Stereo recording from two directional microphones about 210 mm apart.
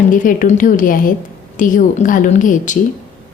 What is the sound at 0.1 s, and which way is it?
A woman's voice, 40° left (ahead or behind).